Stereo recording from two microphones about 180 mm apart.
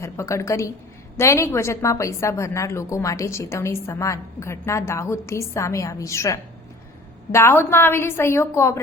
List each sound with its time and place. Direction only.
0.0 s a woman's voice: 15° left (ahead or behind)